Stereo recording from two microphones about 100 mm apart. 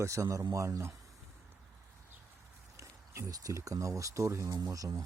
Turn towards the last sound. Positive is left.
turn(degrees=-35)  # may be behind; listen again after turning